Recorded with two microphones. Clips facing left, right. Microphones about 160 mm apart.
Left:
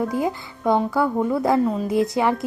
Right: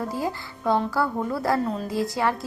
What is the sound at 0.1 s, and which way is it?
Speech, 20° left (ahead or behind).